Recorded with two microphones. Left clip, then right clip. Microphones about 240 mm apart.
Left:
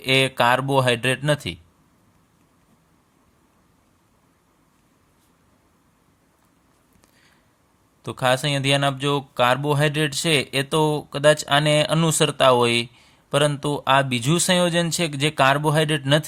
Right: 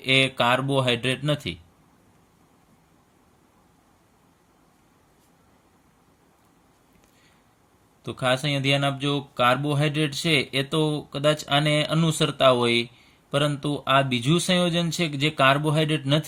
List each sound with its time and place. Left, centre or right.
0.0 s speech: left
8.0 s speech: left